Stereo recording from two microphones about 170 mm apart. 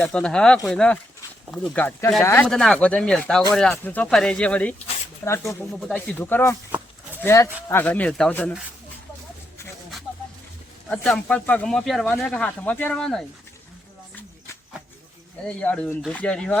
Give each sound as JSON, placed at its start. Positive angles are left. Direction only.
{"t": 0.0, "sound": "speech", "side_deg": 5}
{"t": 6.7, "sound": "livestock", "side_deg": -10}
{"t": 7.2, "sound": "speech", "side_deg": 15}
{"t": 10.8, "sound": "speech", "side_deg": 5}
{"t": 15.4, "sound": "speech", "side_deg": 5}